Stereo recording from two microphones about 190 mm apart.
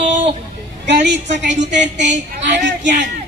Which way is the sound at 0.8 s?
65° right (ahead or behind).